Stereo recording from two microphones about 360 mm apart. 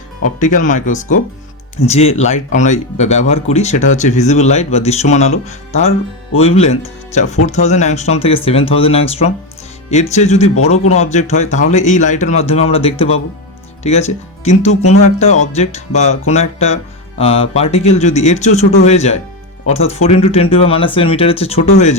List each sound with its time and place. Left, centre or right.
0.3 s speech: left
6.3 s a man's voice: centre